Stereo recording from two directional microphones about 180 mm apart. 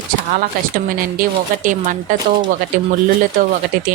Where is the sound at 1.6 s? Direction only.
45° right (ahead or behind).